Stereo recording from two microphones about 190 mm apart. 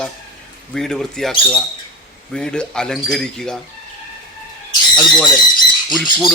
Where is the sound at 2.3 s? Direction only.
5° left (ahead or behind).